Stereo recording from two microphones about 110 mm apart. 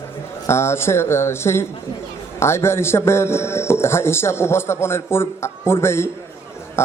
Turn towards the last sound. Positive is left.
turn(degrees=25)  # may be behind; listen again after turning